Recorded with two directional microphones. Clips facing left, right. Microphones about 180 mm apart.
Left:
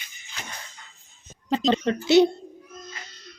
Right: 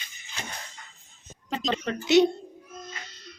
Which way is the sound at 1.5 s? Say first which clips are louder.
Left 7 dB; 30° left (ahead or behind).